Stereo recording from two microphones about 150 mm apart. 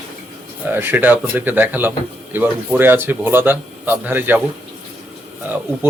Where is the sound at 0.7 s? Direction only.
15° right (ahead or behind).